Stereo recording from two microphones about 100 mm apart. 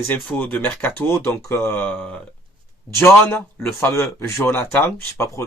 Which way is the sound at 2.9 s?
25° left (ahead or behind).